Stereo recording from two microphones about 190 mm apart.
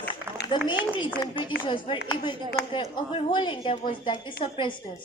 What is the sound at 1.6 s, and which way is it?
A woman's voice, 25° left (ahead or behind).